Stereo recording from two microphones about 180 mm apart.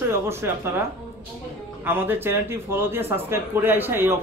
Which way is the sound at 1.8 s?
10° right (ahead or behind).